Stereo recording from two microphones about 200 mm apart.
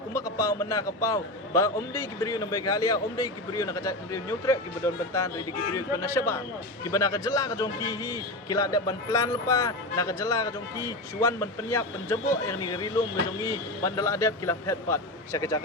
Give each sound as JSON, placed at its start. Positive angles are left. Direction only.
{"t": 0.1, "sound": "speech", "side_deg": 15}